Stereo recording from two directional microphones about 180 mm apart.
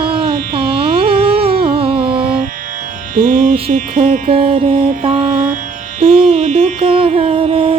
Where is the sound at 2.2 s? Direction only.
55° right (ahead or behind).